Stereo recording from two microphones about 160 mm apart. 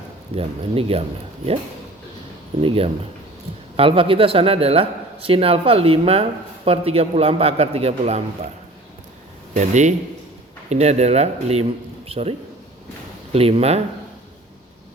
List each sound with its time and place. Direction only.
0.3 s a man's voice: 35° right (ahead or behind)
2.6 s a man's voice: 35° right (ahead or behind)
9.6 s speech: 50° right (ahead or behind)
13.3 s a man's voice: 40° right (ahead or behind)